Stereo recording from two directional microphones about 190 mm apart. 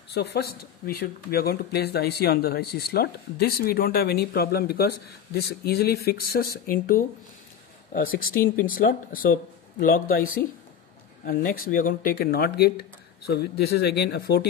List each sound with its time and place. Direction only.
0.1 s speech: 60° left (ahead or behind)
11.2 s speech: 45° left (ahead or behind)